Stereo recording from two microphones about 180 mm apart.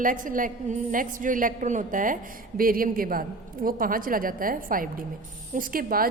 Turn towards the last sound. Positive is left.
turn(degrees=-55)  # may be behind; listen again after turning